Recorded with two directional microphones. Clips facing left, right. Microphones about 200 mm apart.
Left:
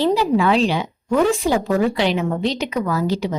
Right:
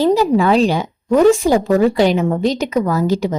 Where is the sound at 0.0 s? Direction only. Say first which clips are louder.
Right 4 dB; 45° right (ahead or behind).